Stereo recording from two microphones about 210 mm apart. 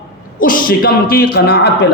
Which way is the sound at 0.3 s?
40° left (ahead or behind).